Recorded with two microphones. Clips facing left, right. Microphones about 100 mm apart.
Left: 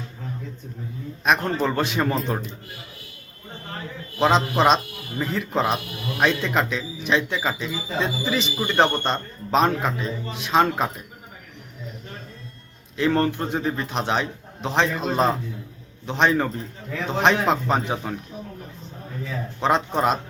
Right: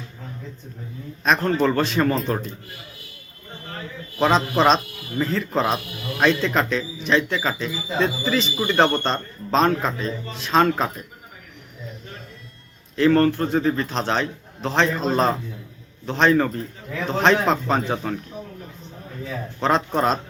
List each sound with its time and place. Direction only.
1.2 s a man's voice: 15° left (ahead or behind)
4.2 s a man's voice: 15° left (ahead or behind)
13.0 s a man's voice: 15° left (ahead or behind)
19.6 s a man's voice: 15° left (ahead or behind)